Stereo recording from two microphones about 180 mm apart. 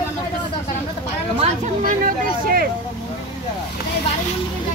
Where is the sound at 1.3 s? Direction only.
45° right (ahead or behind).